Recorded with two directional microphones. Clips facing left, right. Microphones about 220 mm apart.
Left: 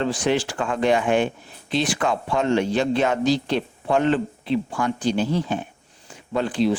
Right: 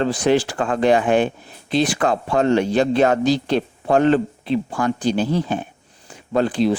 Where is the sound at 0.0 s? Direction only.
40° right (ahead or behind).